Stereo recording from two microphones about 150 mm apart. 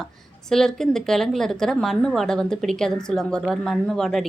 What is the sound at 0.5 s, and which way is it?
A woman's voice, 5° left (ahead or behind).